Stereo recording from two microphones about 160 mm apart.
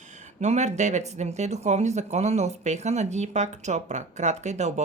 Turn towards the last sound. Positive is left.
turn(degrees=-45)  # may be behind; listen again after turning